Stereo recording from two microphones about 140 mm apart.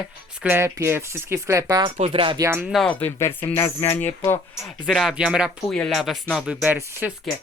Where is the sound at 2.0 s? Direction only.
40° right (ahead or behind).